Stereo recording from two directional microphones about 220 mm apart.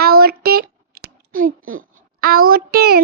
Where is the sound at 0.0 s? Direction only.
45° right (ahead or behind).